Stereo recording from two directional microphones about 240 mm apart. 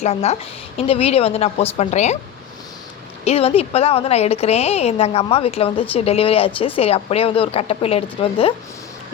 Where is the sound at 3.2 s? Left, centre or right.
Left.